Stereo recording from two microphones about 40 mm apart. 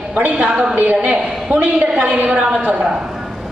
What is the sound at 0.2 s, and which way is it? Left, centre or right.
Speech, right.